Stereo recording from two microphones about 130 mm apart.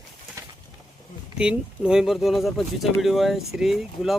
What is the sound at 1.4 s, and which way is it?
Speech, 5° right (ahead or behind).